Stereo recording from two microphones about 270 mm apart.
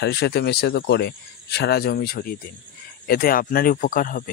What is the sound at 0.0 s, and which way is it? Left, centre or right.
Speech, left.